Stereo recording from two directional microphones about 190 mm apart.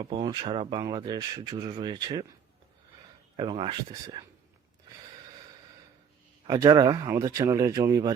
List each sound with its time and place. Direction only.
0.0 s speech: 25° right (ahead or behind)
3.3 s speech: 30° right (ahead or behind)
6.5 s speech: 20° right (ahead or behind)